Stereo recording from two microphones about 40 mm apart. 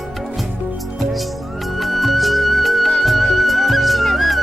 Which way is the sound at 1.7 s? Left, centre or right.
Centre.